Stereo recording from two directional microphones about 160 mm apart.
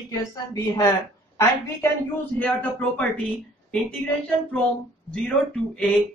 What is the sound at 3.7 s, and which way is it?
Music, 5° left (ahead or behind).